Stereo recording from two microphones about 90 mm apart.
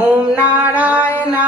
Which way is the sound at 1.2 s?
15° right (ahead or behind).